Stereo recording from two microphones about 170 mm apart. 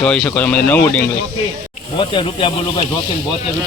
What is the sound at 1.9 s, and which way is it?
Speech, 30° left (ahead or behind).